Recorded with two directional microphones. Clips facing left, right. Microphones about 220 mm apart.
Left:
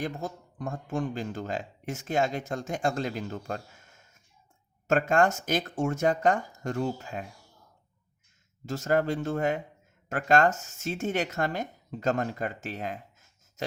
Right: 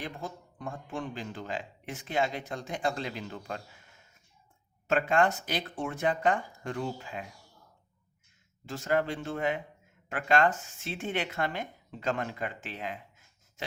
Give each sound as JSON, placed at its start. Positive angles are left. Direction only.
{"t": 0.0, "sound": "speech", "side_deg": 45}
{"t": 8.6, "sound": "speech", "side_deg": 40}